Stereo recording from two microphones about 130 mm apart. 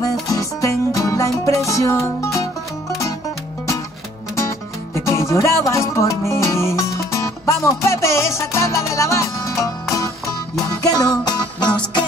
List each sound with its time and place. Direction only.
0.3 s music: 25° left (ahead or behind)
4.4 s music: 20° left (ahead or behind)